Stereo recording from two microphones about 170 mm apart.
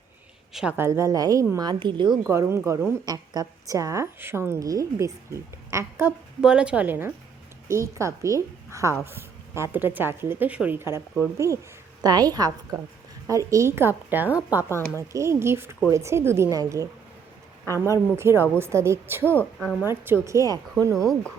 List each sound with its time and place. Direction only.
0.5 s a woman's voice: 5° right (ahead or behind); by 2.1 s 30° right (ahead or behind)
2.2 s a woman's voice: 15° right (ahead or behind)
14.8 s speech: 10° left (ahead or behind)
15.1 s a woman's voice: 15° right (ahead or behind)
17.9 s a woman's voice: 15° right (ahead or behind)
19.2 s speech: 10° left (ahead or behind)
19.8 s a woman's voice: 15° right (ahead or behind)